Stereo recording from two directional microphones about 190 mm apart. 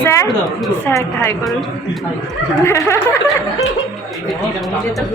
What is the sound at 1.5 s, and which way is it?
Speech, centre (ahead or behind).